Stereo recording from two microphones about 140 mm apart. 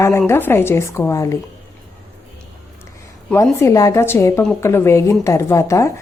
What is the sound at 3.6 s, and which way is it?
A woman's voice, 20° left (ahead or behind).